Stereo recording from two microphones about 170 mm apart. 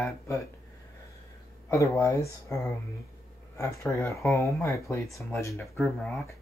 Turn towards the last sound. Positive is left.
turn(degrees=0)  # may be behind; listen again after turning